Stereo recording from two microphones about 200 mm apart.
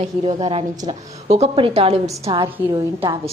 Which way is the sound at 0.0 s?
30° right (ahead or behind).